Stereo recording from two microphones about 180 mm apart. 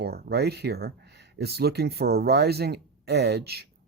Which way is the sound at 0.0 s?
60° right (ahead or behind).